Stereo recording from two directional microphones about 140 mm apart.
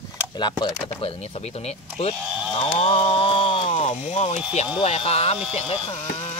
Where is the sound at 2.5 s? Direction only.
40° left (ahead or behind).